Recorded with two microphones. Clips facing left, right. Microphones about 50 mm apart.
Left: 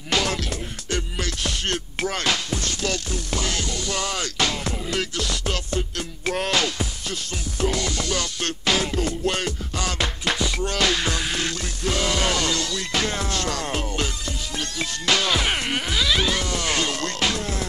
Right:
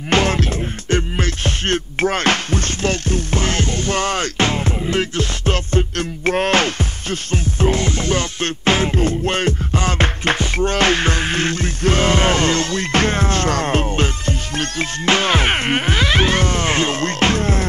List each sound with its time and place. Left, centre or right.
0.1 s music: right